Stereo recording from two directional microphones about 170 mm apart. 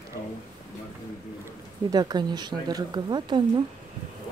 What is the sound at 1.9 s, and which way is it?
Speech, 25° right (ahead or behind).